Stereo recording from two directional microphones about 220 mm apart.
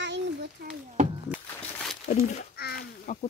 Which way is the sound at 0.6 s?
50° right (ahead or behind).